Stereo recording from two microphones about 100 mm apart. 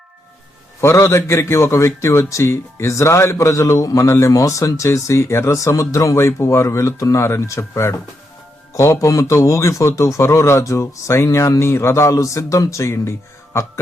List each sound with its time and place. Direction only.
0.8 s a man's voice: 25° left (ahead or behind)